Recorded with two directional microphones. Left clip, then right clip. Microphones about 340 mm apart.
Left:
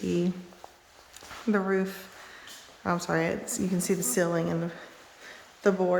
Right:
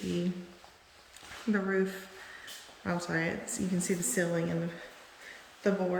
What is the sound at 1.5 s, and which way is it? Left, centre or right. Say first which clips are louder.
A woman's voice: left 3 dB; centre.